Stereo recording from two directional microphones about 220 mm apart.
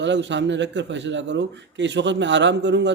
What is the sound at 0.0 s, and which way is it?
A man's voice, 55° right (ahead or behind).